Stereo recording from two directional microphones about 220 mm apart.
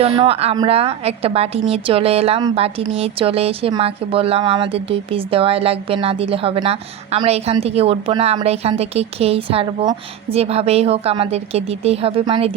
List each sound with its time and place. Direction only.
0.0 s a woman's voice: 25° right (ahead or behind)